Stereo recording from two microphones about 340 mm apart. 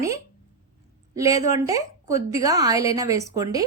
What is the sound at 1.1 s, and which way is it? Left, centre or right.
A woman's voice, centre.